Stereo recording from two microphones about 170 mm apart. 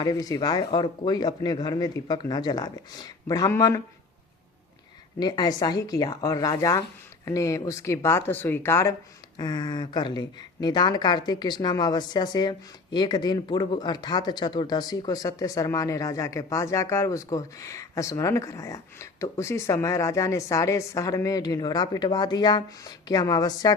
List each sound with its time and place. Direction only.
0.0 s speech: 20° left (ahead or behind)
5.2 s speech: 25° left (ahead or behind)